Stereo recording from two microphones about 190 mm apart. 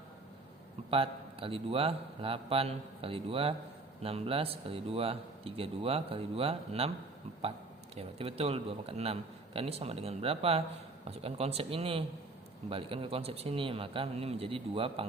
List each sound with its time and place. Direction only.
0.9 s speech: 30° right (ahead or behind)
7.9 s a man's voice: 30° right (ahead or behind)